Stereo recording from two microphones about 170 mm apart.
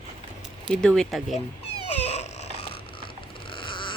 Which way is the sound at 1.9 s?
40° left (ahead or behind).